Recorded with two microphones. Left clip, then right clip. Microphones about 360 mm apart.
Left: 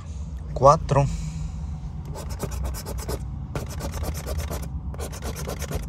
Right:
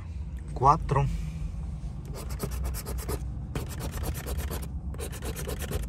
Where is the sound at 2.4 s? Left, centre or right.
Centre.